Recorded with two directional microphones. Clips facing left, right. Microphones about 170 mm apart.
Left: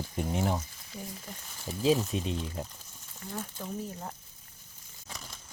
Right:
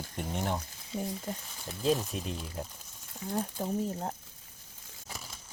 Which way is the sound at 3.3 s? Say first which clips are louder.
Right 5 dB; 35° right (ahead or behind).